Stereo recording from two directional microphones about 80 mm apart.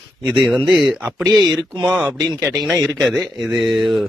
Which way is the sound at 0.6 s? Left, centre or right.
Centre.